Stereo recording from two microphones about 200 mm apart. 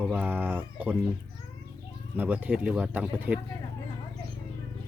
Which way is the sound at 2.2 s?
10° right (ahead or behind).